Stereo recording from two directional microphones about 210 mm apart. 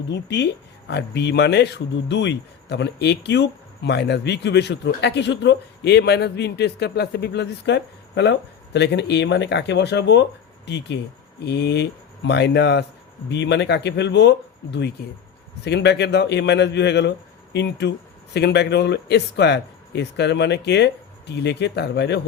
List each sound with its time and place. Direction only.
0.1 s speech: 55° left (ahead or behind)